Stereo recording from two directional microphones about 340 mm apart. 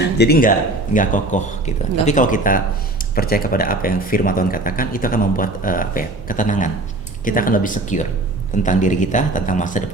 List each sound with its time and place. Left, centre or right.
0.0 s a man's voice: left